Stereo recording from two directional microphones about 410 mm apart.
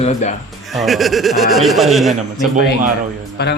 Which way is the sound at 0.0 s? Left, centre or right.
Centre.